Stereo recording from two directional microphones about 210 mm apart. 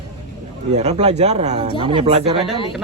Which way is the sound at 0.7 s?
30° right (ahead or behind).